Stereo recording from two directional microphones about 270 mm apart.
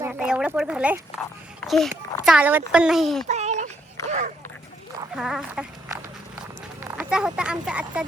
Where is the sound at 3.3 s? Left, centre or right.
Right.